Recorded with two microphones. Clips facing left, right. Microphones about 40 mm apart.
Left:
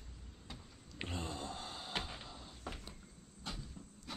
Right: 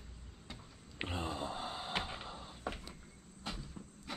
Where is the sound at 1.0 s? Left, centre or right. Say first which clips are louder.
Right 4 dB; centre.